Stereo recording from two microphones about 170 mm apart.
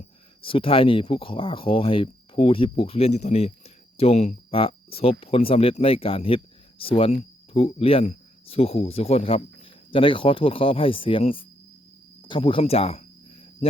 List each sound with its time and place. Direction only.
0.4 s speech: 30° left (ahead or behind)
12.2 s cricket: 30° left (ahead or behind)